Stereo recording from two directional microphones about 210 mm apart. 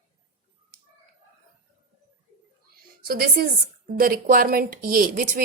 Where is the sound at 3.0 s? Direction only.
45° right (ahead or behind).